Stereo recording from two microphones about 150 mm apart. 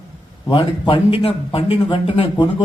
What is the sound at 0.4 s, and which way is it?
Speech, 35° left (ahead or behind).